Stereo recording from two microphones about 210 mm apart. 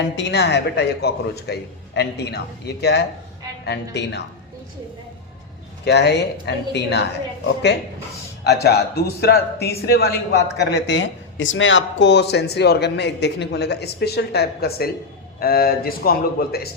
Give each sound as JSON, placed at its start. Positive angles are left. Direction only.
{"t": 0.0, "sound": "a man's voice", "side_deg": 55}
{"t": 5.8, "sound": "a man's voice", "side_deg": 50}